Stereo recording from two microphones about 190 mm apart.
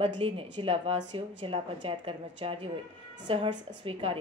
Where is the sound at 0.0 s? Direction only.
30° right (ahead or behind).